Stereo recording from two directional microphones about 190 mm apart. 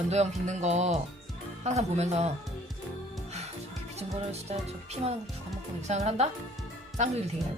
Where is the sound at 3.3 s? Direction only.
35° right (ahead or behind).